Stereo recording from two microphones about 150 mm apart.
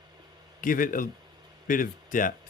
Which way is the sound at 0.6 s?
65° left (ahead or behind).